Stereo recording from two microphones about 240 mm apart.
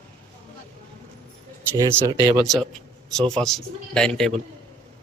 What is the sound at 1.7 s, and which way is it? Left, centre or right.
Speech, centre.